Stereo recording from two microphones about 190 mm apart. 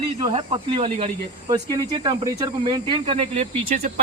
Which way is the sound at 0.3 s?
30° right (ahead or behind).